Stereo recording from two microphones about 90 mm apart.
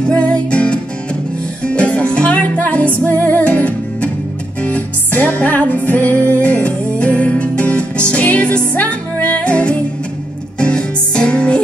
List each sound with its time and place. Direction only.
0.1 s music: 15° left (ahead or behind)